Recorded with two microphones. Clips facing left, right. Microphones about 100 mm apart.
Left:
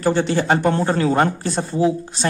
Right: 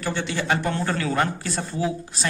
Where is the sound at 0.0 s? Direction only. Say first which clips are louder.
Left 9 dB; 35° left (ahead or behind).